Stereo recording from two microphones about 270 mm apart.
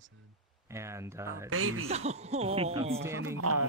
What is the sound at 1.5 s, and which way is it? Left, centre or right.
Speech, right.